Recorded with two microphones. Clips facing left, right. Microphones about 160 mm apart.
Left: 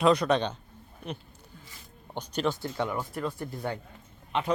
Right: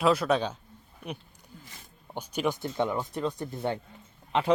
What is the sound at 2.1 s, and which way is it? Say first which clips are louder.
Speech: even; 10° right (ahead or behind).